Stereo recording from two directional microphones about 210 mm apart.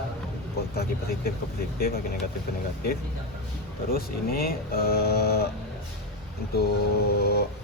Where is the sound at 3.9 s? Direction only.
45° left (ahead or behind).